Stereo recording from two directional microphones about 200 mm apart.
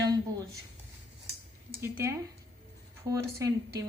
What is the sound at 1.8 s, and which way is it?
A woman's voice, 15° right (ahead or behind).